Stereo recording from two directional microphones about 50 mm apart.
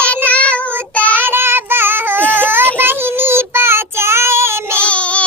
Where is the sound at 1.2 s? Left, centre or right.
Right.